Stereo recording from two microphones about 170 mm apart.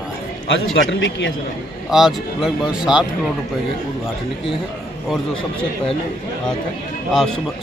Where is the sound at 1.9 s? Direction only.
Centre (ahead or behind).